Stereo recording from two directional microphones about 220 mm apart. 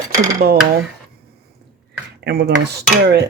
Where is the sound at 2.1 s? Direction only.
50° right (ahead or behind).